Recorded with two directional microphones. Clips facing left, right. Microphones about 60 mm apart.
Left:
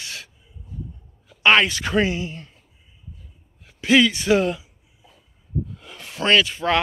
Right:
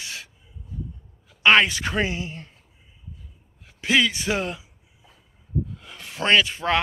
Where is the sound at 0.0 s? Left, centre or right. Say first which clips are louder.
Left 1 dB; centre.